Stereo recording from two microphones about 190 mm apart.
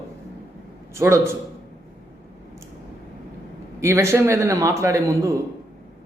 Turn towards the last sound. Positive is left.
turn(degrees=-15)  # may be behind; listen again after turning